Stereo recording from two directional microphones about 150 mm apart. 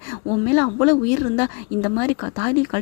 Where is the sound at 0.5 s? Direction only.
20° left (ahead or behind).